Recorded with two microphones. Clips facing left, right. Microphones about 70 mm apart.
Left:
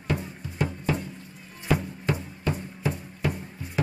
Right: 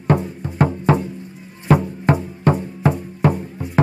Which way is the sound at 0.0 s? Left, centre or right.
Right.